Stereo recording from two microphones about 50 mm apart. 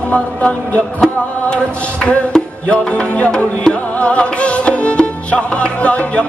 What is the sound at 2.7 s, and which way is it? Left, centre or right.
Music, left.